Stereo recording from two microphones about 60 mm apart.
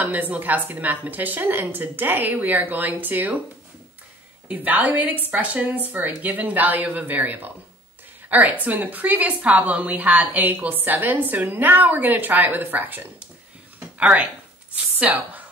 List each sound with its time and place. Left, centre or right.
0.0 s a woman's voice: right
4.5 s a woman's voice: right
15.0 s a woman's voice: right